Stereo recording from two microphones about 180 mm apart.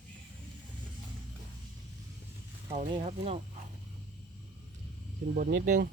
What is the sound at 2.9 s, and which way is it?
Speech, 35° right (ahead or behind).